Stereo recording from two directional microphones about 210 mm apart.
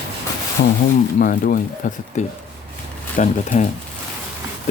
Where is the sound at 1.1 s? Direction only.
40° left (ahead or behind).